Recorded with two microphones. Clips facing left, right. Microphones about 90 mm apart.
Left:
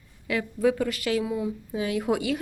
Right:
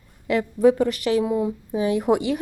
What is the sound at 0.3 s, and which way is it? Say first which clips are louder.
Speech: right 6 dB; 25° right (ahead or behind).